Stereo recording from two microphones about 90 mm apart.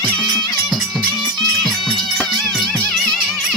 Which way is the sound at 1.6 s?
Centre (ahead or behind).